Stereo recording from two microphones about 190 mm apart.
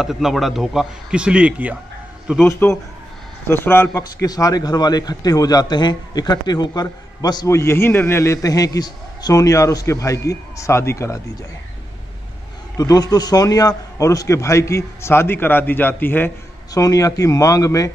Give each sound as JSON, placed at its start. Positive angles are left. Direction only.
{"t": 0.0, "sound": "speech", "side_deg": 0}
{"t": 2.6, "sound": "a man's voice", "side_deg": 10}
{"t": 12.7, "sound": "a man's voice", "side_deg": 20}